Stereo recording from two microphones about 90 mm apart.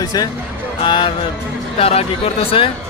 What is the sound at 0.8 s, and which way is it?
Speech, 70° left (ahead or behind).